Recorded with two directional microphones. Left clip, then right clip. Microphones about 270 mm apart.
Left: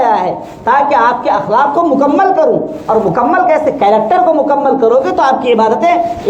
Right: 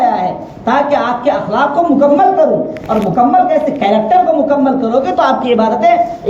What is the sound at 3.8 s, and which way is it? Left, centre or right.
A woman's voice, left.